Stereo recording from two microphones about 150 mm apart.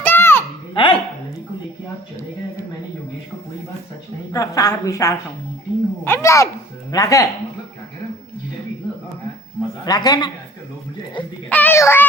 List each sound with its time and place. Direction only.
0.0 s a sound: 15° left (ahead or behind)
0.7 s dog: 35° left (ahead or behind)
4.3 s a woman's voice: 25° left (ahead or behind)
9.8 s a woman's voice: 25° left (ahead or behind)
11.4 s a child's voice: 10° left (ahead or behind)